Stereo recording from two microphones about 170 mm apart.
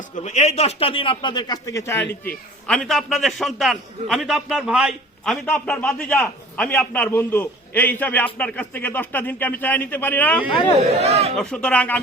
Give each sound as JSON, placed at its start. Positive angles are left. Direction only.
{"t": 0.3, "sound": "a man's voice", "side_deg": 40}
{"t": 2.6, "sound": "a man's voice", "side_deg": 5}
{"t": 10.8, "sound": "speech", "side_deg": -40}
{"t": 11.3, "sound": "a man's voice", "side_deg": 5}